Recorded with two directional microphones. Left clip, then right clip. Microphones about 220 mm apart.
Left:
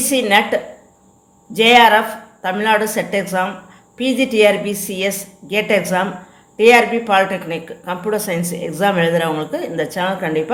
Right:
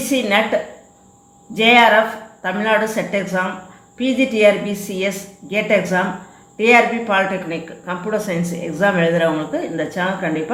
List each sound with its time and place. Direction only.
0.1 s speech: 45° left (ahead or behind)